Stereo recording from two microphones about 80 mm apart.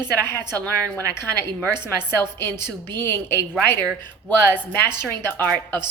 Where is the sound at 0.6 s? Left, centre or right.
Centre.